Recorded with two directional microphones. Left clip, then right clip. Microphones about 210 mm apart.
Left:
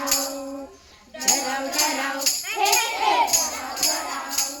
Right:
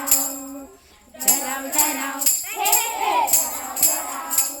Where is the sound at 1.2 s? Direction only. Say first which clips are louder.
Left 1 dB; 55° right (ahead or behind).